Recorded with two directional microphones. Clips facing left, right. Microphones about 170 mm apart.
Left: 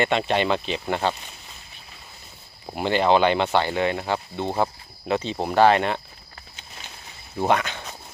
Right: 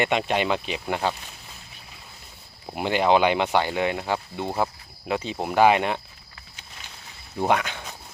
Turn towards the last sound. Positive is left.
turn(degrees=-10)  # may be behind; listen again after turning